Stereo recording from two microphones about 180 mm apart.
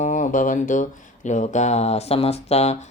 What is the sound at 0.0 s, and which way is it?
Speech, 45° left (ahead or behind).